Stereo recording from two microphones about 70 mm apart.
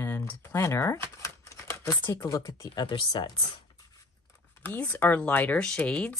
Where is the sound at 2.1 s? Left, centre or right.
Left.